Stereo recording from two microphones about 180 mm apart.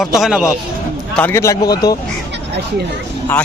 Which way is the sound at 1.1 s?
10° left (ahead or behind).